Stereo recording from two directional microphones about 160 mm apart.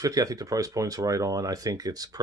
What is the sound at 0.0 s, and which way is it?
Speech, 20° right (ahead or behind).